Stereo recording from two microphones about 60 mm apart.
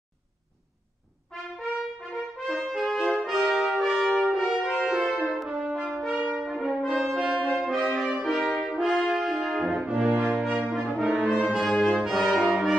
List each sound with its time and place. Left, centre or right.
1.3 s brass instrument: centre
2.0 s trumpet: centre
5.3 s brass instrument: centre
6.1 s brass instrument: centre
6.4 s brass instrument: centre